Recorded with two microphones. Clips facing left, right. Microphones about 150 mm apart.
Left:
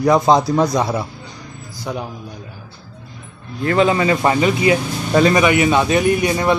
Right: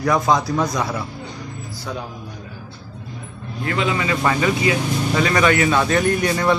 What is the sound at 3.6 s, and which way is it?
A man's voice, 40° left (ahead or behind).